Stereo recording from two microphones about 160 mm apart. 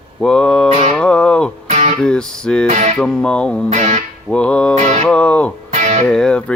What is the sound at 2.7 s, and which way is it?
Music, 50° right (ahead or behind).